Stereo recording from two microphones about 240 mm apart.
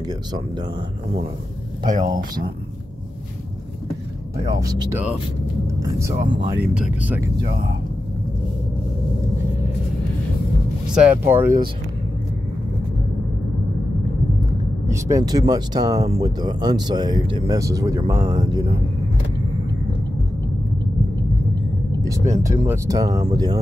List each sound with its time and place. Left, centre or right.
0.0 s speech: centre
1.9 s speech: right
4.6 s speech: centre
6.7 s speech: centre
11.0 s speech: centre
14.9 s speech: centre
22.0 s speech: centre